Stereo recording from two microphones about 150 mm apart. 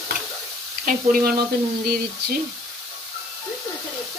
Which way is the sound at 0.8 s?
70° right (ahead or behind).